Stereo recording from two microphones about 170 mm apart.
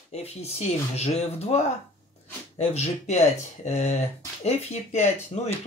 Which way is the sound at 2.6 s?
40° left (ahead or behind).